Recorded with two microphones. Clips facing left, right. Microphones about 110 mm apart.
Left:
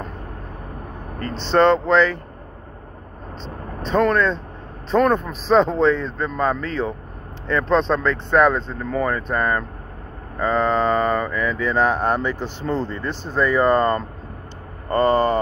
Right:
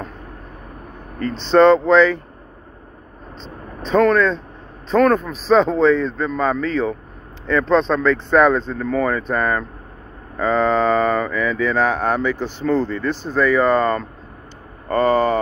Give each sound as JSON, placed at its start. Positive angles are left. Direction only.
{"t": 1.4, "sound": "speech", "side_deg": -10}
{"t": 3.8, "sound": "speech", "side_deg": -5}
{"t": 8.5, "sound": "speech", "side_deg": 15}
{"t": 8.9, "sound": "speech", "side_deg": 0}
{"t": 12.6, "sound": "speech", "side_deg": 25}
{"t": 13.1, "sound": "speech", "side_deg": 0}
{"t": 15.0, "sound": "speech", "side_deg": -5}